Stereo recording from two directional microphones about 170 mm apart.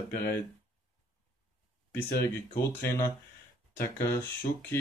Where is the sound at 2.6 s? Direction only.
15° left (ahead or behind).